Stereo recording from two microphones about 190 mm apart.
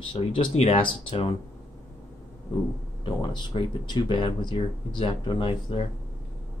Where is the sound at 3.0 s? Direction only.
25° left (ahead or behind).